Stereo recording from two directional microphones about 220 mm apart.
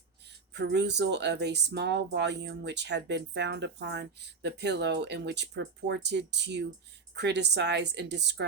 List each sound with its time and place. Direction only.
0.5 s speech: 50° right (ahead or behind)